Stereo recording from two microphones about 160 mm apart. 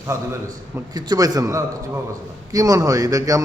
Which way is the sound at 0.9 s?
25° right (ahead or behind).